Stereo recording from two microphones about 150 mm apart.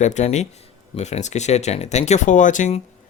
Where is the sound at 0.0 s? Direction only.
50° left (ahead or behind).